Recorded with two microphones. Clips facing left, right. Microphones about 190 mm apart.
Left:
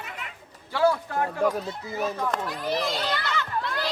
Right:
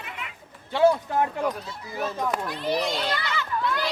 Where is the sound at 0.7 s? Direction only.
20° right (ahead or behind).